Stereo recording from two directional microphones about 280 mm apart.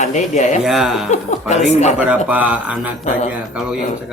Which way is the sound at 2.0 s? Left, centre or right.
Centre.